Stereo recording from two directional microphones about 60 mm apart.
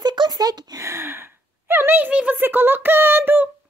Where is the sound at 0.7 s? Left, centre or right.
Right.